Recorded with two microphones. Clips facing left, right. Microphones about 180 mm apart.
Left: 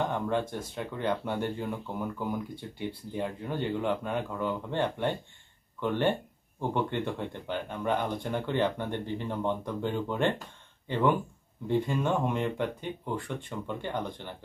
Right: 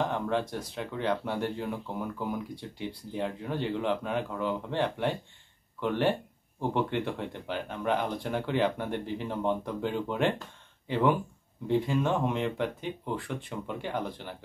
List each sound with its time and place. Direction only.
0.0 s speech: centre (ahead or behind)